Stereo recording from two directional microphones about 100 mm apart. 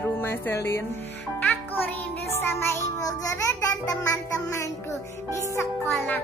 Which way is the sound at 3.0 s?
35° left (ahead or behind).